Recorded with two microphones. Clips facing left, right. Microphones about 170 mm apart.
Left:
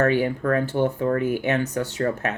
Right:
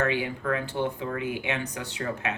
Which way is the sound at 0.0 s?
45° left (ahead or behind).